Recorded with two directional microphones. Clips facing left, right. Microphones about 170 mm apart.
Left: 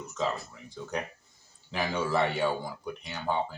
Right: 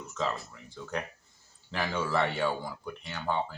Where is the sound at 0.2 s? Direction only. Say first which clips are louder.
Left 1 dB; 10° left (ahead or behind).